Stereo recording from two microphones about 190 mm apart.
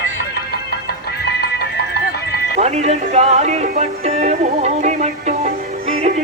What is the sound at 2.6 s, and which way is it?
Music, 35° right (ahead or behind).